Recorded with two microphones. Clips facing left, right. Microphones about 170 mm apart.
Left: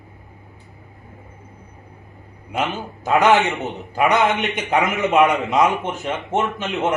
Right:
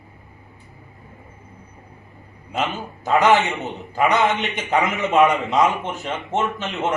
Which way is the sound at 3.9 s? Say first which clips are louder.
Left 1 dB; 15° left (ahead or behind).